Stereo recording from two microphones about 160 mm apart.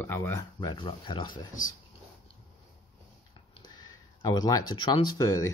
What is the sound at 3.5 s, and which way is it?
Speech, 25° left (ahead or behind).